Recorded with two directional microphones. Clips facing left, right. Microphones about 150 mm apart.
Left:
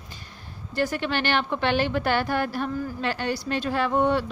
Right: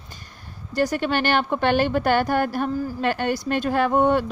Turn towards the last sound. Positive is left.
turn(degrees=-50)  # may be behind; listen again after turning